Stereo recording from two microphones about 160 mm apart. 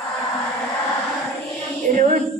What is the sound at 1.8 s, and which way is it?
Music, 50° right (ahead or behind).